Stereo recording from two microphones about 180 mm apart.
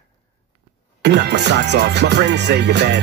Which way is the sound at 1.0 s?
70° right (ahead or behind).